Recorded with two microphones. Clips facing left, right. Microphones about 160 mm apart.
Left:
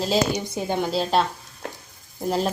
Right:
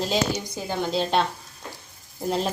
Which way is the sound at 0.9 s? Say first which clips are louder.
Even; centre (ahead or behind).